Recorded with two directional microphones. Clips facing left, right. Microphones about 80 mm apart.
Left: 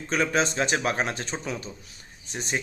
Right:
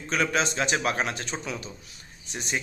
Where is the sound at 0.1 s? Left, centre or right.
Left.